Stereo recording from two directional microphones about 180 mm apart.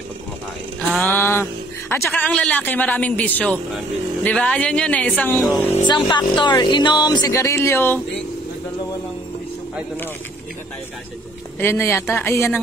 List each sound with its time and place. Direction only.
0.9 s speech: 10° left (ahead or behind)
5.8 s speech: 25° left (ahead or behind)
11.6 s speech: 15° left (ahead or behind)